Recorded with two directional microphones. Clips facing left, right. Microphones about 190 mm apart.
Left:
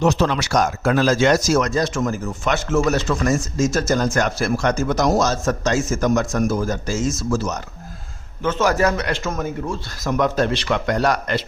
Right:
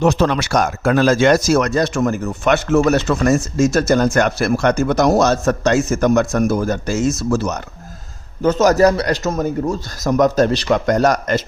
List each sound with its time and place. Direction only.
0.0 s speech: 55° right (ahead or behind)
8.4 s a man's voice: 40° right (ahead or behind)